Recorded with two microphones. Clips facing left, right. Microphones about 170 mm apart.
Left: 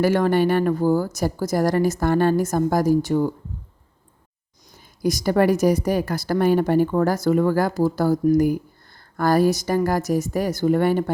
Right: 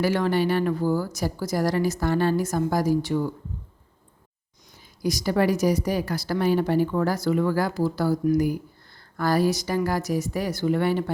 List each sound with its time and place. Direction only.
0.0 s a woman's voice: 50° left (ahead or behind)
5.0 s a woman's voice: 50° left (ahead or behind)